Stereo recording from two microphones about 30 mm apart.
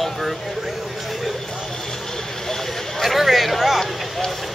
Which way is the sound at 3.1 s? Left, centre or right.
Centre.